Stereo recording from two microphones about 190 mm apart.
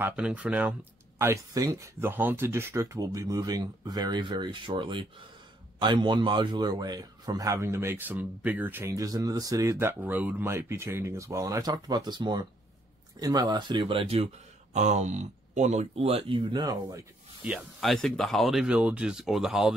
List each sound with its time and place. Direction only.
0.0 s a man's voice: 5° right (ahead or behind)
17.5 s speech: centre (ahead or behind)